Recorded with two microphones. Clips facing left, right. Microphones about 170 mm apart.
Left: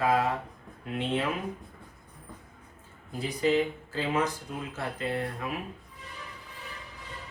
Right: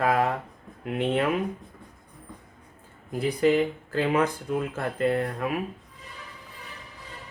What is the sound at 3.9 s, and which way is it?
Speech, 55° right (ahead or behind).